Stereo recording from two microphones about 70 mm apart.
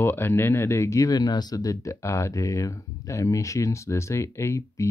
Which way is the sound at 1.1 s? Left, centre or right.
Left.